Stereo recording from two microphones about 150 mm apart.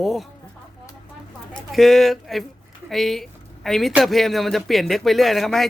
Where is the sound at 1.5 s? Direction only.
Centre (ahead or behind).